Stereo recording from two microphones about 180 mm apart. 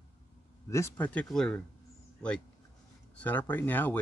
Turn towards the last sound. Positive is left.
turn(degrees=10)  # may be behind; listen again after turning